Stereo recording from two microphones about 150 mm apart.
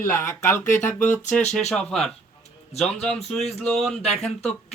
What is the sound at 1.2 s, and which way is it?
Speech, 50° left (ahead or behind).